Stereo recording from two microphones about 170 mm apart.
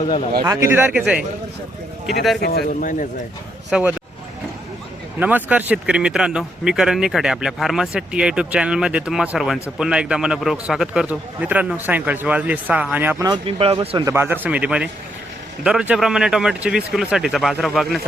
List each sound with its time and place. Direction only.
0.4 s a man's voice: 15° right (ahead or behind)
2.4 s speech: 65° left (ahead or behind)
2.6 s speech: 50° left (ahead or behind)
3.7 s speech: 5° right (ahead or behind)
5.2 s speech: 10° right (ahead or behind)
13.2 s a man's voice: 30° right (ahead or behind); by 18.0 s centre (ahead or behind)